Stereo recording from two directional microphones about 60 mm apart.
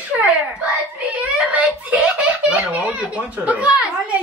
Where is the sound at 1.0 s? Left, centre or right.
Right.